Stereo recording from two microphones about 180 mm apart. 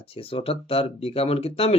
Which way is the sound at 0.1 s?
30° left (ahead or behind).